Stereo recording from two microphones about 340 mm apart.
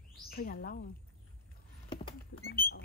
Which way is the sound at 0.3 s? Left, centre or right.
Left.